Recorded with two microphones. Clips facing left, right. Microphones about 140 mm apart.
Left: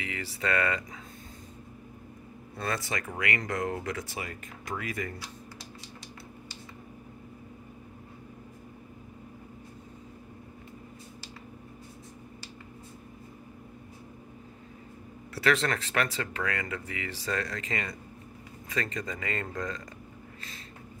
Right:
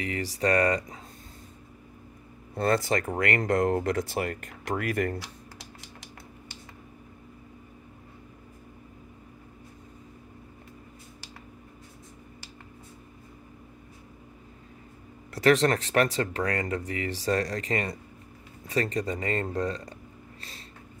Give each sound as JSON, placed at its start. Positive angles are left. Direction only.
{"t": 0.0, "sound": "speech", "side_deg": -40}
{"t": 2.5, "sound": "speech", "side_deg": -50}
{"t": 4.1, "sound": "speech", "side_deg": -60}
{"t": 15.4, "sound": "speech", "side_deg": -40}